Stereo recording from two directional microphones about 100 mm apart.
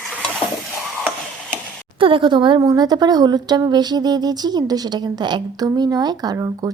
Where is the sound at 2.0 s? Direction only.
60° right (ahead or behind).